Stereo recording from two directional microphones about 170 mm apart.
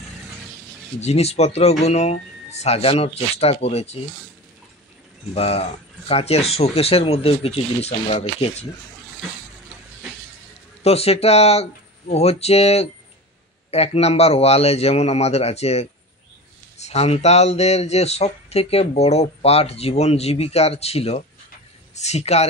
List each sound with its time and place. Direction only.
1.0 s speech: 40° left (ahead or behind)
5.3 s speech: 35° left (ahead or behind)
10.8 s speech: 35° left (ahead or behind)